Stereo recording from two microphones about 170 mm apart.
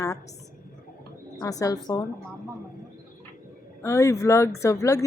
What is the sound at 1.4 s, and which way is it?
Speech, 20° left (ahead or behind).